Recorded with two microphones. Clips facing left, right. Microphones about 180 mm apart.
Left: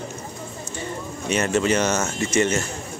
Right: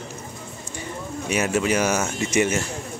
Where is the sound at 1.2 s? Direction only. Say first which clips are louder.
Left 1 dB; 10° right (ahead or behind).